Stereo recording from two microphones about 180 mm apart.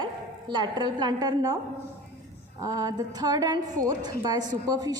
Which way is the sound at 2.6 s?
20° right (ahead or behind).